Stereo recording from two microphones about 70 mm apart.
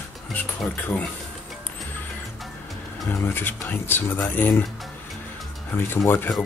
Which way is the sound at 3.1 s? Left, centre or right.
Left.